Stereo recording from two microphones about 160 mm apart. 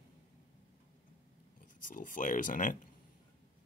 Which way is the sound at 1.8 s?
55° left (ahead or behind).